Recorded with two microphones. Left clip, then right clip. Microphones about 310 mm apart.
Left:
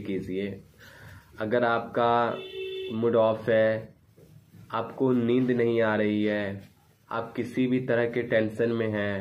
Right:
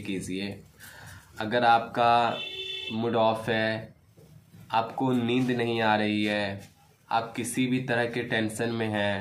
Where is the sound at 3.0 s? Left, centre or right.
Centre.